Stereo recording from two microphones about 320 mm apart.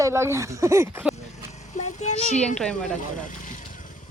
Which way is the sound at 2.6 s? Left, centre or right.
Centre.